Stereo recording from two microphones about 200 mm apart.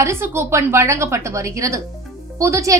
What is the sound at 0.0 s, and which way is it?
A woman's voice, 15° right (ahead or behind).